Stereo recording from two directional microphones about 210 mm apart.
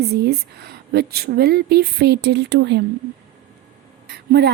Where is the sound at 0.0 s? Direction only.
50° right (ahead or behind).